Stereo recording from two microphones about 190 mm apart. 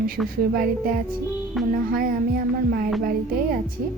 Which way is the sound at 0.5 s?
50° right (ahead or behind).